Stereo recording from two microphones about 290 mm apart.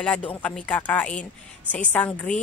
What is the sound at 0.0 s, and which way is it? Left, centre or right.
Speech, centre.